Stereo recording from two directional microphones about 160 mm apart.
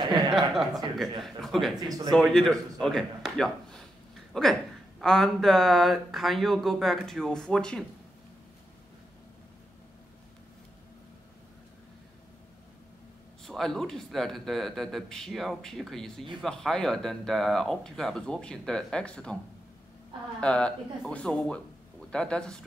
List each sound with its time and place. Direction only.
0.3 s speech: centre (ahead or behind)
1.8 s speech: 20° right (ahead or behind)
2.0 s speech: centre (ahead or behind)
13.5 s speech: centre (ahead or behind)
20.3 s speech: 5° left (ahead or behind)